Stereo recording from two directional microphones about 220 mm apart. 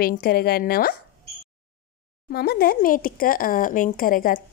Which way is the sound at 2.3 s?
45° left (ahead or behind).